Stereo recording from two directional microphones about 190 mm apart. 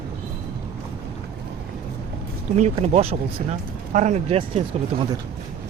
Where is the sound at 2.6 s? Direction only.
30° right (ahead or behind).